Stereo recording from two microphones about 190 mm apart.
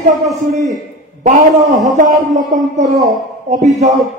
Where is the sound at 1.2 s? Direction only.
40° right (ahead or behind).